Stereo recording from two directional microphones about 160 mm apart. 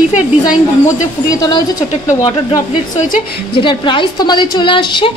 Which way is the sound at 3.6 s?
30° left (ahead or behind).